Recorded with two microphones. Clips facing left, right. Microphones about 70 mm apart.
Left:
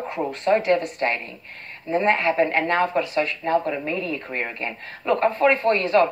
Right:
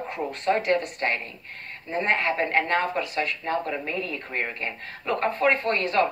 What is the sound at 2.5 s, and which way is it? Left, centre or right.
A woman's voice, left.